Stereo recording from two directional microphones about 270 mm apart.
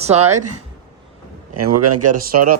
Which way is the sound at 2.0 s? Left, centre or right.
Right.